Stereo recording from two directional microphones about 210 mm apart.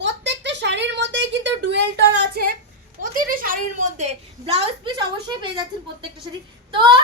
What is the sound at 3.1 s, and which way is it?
A woman's voice, 40° right (ahead or behind).